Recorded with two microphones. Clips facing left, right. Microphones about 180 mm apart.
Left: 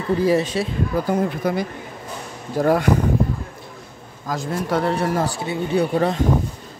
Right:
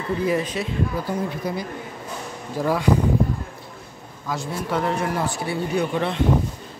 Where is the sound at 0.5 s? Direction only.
35° left (ahead or behind).